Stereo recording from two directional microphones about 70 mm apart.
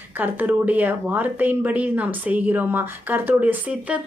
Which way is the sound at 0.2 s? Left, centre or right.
Right.